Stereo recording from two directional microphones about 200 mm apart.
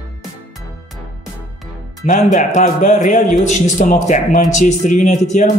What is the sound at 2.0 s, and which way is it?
A man's voice, 40° left (ahead or behind).